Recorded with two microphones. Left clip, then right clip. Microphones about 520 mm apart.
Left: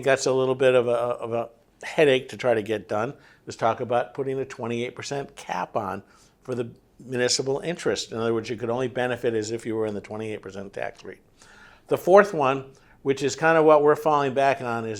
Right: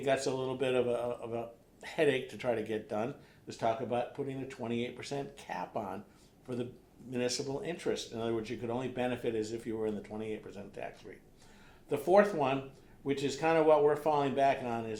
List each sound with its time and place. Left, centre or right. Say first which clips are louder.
0.0 s speech: left 11 dB; left
11.9 s speech: left 10 dB; left